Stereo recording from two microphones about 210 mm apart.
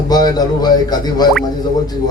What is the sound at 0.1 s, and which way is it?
A man's voice, 20° left (ahead or behind).